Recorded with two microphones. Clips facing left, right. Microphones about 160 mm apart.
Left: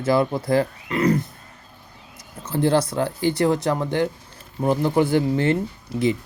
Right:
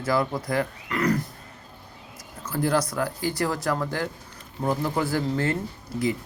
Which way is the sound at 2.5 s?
25° left (ahead or behind).